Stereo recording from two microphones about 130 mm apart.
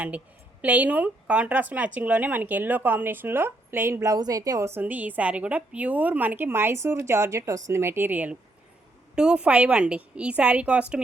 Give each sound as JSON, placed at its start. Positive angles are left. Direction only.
{"t": 0.6, "sound": "speech", "side_deg": -10}